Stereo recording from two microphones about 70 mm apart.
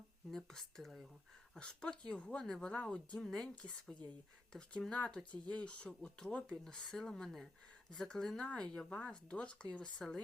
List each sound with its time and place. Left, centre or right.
0.3 s speech: centre